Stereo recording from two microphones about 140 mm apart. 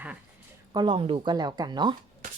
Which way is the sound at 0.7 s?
35° right (ahead or behind).